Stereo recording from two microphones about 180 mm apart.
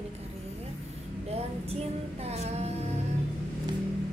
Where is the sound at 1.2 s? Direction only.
35° right (ahead or behind).